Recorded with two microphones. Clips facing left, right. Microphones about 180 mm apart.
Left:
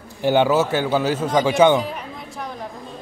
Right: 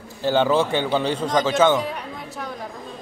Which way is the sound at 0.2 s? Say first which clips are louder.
Left 2 dB; 15° left (ahead or behind).